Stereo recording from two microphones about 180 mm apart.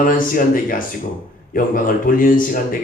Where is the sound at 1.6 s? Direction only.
50° left (ahead or behind).